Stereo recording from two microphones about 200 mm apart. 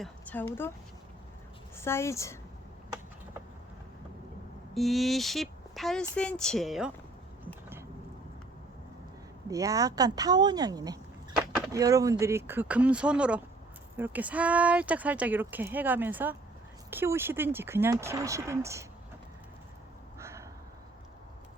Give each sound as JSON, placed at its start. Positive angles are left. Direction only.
{"t": 0.0, "sound": "a woman's voice", "side_deg": 10}
{"t": 1.7, "sound": "a woman's voice", "side_deg": 10}
{"t": 4.7, "sound": "speech", "side_deg": 0}
{"t": 9.5, "sound": "speech", "side_deg": -15}
{"t": 20.1, "sound": "a sound", "side_deg": -15}